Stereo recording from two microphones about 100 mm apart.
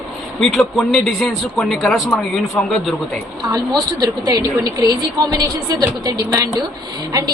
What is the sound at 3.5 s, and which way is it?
A woman's voice, 35° right (ahead or behind).